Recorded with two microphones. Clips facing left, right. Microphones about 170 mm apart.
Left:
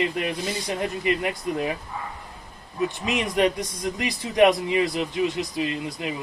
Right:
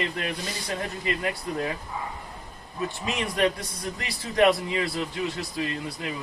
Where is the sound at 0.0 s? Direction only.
20° left (ahead or behind).